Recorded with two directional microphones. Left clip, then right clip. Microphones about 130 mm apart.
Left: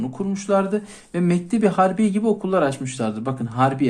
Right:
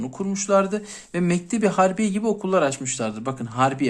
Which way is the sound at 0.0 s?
30° right (ahead or behind).